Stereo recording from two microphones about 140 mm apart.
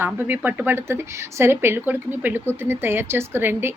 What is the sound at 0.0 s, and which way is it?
Speech, 15° right (ahead or behind).